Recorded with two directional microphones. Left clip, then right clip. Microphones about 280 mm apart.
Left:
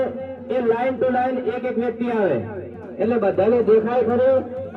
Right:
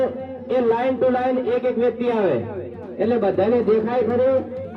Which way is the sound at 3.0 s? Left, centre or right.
Right.